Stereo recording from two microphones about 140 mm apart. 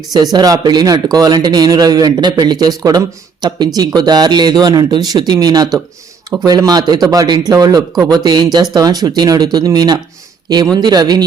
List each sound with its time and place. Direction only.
0.1 s speech: 30° right (ahead or behind)